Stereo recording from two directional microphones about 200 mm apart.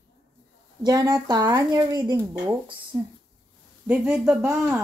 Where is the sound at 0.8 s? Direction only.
20° right (ahead or behind).